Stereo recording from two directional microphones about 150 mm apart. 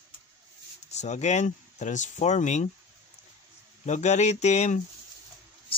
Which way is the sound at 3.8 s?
50° left (ahead or behind).